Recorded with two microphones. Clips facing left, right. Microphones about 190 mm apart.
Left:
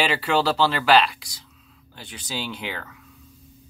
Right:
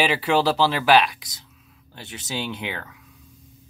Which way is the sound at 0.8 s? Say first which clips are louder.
Right 1 dB; 15° right (ahead or behind).